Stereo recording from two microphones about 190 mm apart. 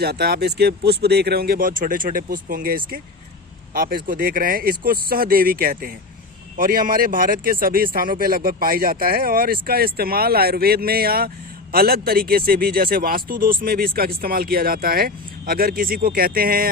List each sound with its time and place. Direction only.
0.0 s a man's voice: 55° right (ahead or behind)